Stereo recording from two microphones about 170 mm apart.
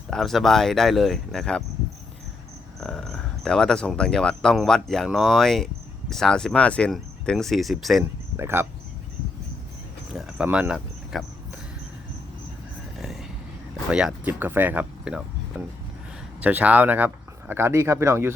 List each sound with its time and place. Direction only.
0.1 s speech: centre (ahead or behind)
2.8 s speech: 5° left (ahead or behind)
8.4 s speech: 15° right (ahead or behind)
10.1 s speech: 5° right (ahead or behind)
13.0 s whispering: centre (ahead or behind)
13.9 s speech: 5° right (ahead or behind)